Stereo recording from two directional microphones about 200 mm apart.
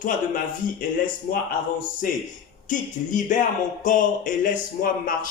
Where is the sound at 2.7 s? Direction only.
40° left (ahead or behind).